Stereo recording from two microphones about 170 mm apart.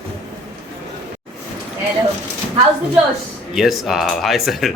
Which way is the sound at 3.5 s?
Centre (ahead or behind).